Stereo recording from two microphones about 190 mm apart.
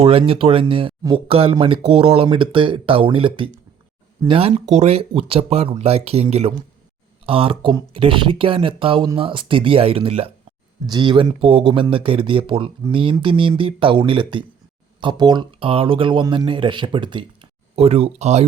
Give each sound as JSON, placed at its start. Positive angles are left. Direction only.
{"t": 0.0, "sound": "speech", "side_deg": -30}